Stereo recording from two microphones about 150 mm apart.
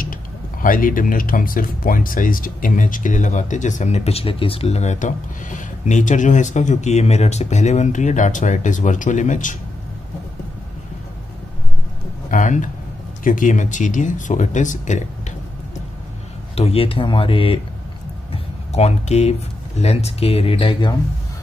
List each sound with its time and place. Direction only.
0.0 s speech: 65° left (ahead or behind)
12.3 s a sound: 55° left (ahead or behind)
13.2 s speech: 60° left (ahead or behind)
16.5 s speech: 40° left (ahead or behind)
18.3 s a sound: 45° left (ahead or behind)
19.8 s speech: 45° left (ahead or behind)